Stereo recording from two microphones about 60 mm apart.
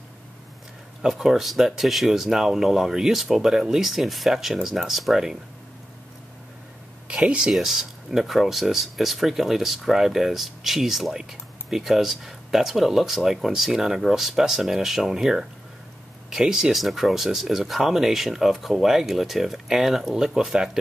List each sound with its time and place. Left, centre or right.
1.0 s speech: centre
7.2 s speech: centre